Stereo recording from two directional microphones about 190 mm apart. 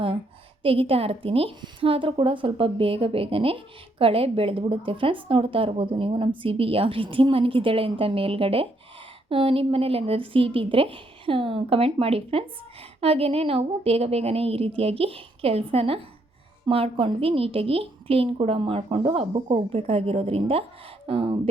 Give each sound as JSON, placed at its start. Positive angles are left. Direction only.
{"t": 0.6, "sound": "a woman's voice", "side_deg": -30}